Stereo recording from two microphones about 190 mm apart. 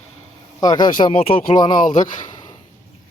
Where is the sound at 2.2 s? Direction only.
20° left (ahead or behind).